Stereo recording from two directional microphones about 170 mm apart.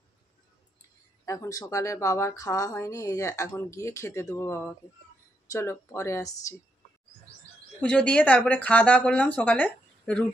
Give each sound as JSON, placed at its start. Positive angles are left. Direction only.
{"t": 1.2, "sound": "speech", "side_deg": 20}
{"t": 7.8, "sound": "speech", "side_deg": 5}